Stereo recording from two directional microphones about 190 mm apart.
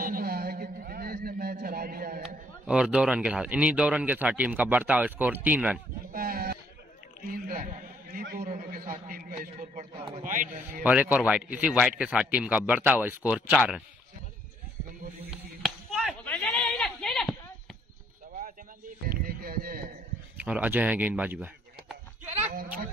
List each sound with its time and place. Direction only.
0.0 s a sound: 50° right (ahead or behind)
2.6 s a man's voice: 5° right (ahead or behind)
6.1 s a sound: 50° right (ahead or behind)
7.2 s a man's voice: 50° right (ahead or behind)
9.5 s a man's voice: 35° right (ahead or behind)
10.2 s a man's voice: 45° right (ahead or behind)
10.8 s a man's voice: 10° right (ahead or behind)
15.6 s chop: centre (ahead or behind)
16.3 s a sound: 5° left (ahead or behind)
19.0 s a sound: 50° right (ahead or behind)
20.3 s a man's voice: 5° right (ahead or behind)
22.5 s speech: 50° right (ahead or behind)